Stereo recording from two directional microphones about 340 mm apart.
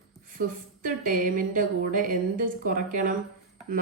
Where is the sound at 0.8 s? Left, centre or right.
Right.